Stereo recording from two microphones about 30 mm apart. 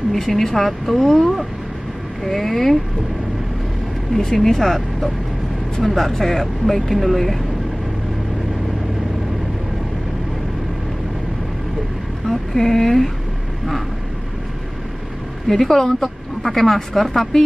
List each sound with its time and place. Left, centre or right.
0.1 s speech: centre
4.2 s speech: centre
12.3 s speech: centre
15.4 s speech: centre